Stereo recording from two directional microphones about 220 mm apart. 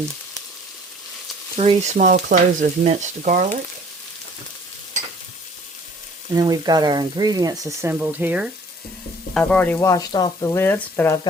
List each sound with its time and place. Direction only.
1.5 s frying: 30° right (ahead or behind)
6.3 s speech: 20° right (ahead or behind)
9.3 s speech: 5° left (ahead or behind)